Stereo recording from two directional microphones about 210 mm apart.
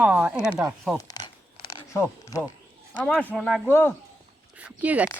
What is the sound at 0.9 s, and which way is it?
Crumpling, 20° left (ahead or behind).